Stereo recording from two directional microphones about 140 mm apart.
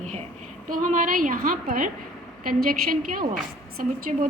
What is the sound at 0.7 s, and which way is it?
A woman's voice, 65° right (ahead or behind).